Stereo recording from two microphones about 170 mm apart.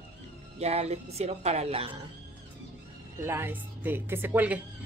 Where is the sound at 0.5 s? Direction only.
40° right (ahead or behind).